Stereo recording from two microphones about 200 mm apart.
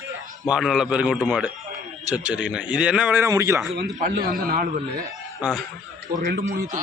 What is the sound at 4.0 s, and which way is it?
Speech, 45° right (ahead or behind).